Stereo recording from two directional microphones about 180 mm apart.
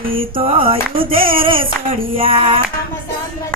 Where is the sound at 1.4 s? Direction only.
30° right (ahead or behind).